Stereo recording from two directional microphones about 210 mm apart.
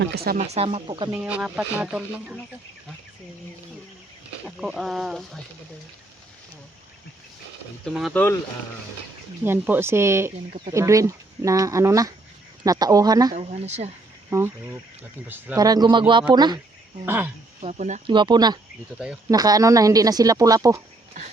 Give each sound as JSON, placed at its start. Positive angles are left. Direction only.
{"t": 0.0, "sound": "speech", "side_deg": -50}
{"t": 0.4, "sound": "speech", "side_deg": -30}
{"t": 1.1, "sound": "speech", "side_deg": -5}
{"t": 4.4, "sound": "speech", "side_deg": 0}
{"t": 7.9, "sound": "speech", "side_deg": 0}
{"t": 9.4, "sound": "speech", "side_deg": -10}
{"t": 13.3, "sound": "speech", "side_deg": -30}
{"t": 14.3, "sound": "speech", "side_deg": -10}
{"t": 17.1, "sound": "speech", "side_deg": -10}
{"t": 17.6, "sound": "speech", "side_deg": -30}
{"t": 18.0, "sound": "speech", "side_deg": -20}